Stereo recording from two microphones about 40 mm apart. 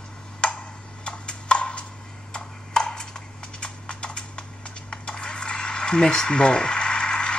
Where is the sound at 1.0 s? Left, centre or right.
Left.